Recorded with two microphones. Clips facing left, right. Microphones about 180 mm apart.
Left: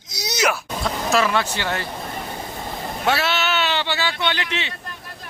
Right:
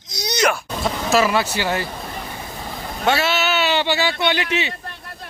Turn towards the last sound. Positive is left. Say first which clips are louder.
# right 4 dB
turn(degrees=-10)  # may be behind; listen again after turning